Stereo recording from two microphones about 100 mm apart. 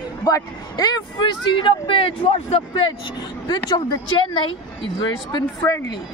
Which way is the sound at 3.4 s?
40° left (ahead or behind).